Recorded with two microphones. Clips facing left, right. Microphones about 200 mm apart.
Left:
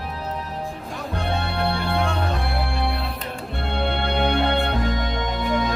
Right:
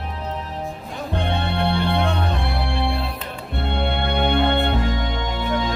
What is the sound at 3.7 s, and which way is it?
Music, 20° right (ahead or behind).